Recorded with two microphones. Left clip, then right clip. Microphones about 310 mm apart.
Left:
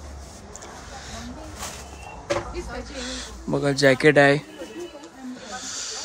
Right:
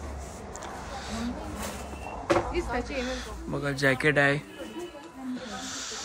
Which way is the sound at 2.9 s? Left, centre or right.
Centre.